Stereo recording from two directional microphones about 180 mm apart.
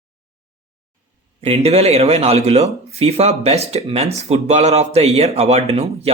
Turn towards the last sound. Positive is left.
turn(degrees=-35)  # may be behind; listen again after turning